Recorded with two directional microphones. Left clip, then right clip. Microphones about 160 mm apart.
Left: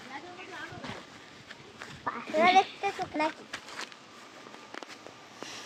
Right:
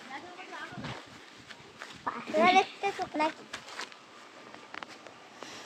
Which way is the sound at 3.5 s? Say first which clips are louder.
Left 1 dB; 55° left (ahead or behind).